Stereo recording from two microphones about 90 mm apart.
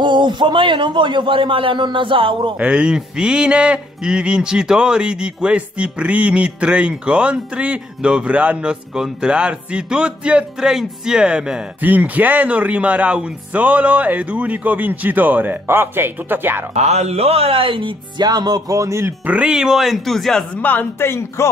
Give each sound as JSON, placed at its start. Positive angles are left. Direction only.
{"t": 0.0, "sound": "a man's voice", "side_deg": -60}
{"t": 2.6, "sound": "speech", "side_deg": -10}
{"t": 17.4, "sound": "speech", "side_deg": -90}
{"t": 19.2, "sound": "speech", "side_deg": -15}
{"t": 20.6, "sound": "speech", "side_deg": 20}